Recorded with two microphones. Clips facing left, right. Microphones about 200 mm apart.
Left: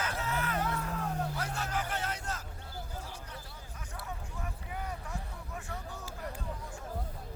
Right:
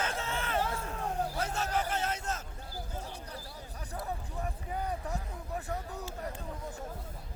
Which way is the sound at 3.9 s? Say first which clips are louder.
Right 5 dB; 35° right (ahead or behind).